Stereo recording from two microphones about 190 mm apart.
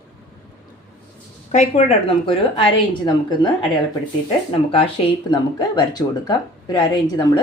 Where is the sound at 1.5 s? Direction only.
40° left (ahead or behind).